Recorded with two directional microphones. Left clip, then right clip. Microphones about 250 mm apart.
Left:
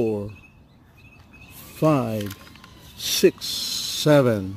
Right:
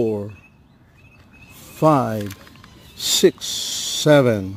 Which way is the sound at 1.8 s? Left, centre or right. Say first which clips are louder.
Right 5 dB; centre.